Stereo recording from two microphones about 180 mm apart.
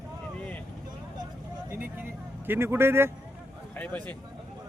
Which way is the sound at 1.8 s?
10° right (ahead or behind).